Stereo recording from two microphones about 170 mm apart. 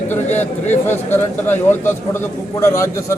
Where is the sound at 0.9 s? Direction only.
15° left (ahead or behind).